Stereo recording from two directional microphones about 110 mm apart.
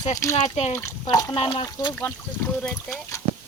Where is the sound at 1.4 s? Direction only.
60° left (ahead or behind).